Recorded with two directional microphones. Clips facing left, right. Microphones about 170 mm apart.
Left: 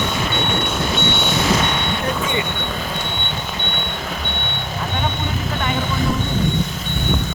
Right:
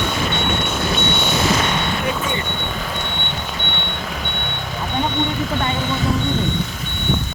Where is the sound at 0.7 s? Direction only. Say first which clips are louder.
Even; centre (ahead or behind).